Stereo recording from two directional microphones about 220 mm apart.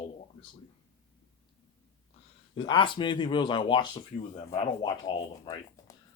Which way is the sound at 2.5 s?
25° left (ahead or behind).